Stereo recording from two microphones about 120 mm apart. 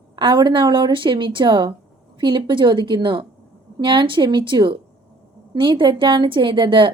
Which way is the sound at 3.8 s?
45° right (ahead or behind).